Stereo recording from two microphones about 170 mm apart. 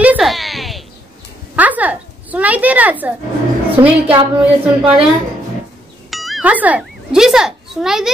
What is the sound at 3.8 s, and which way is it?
Speech, 20° right (ahead or behind).